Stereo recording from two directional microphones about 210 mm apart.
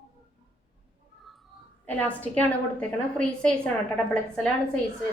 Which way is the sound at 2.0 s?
5° left (ahead or behind).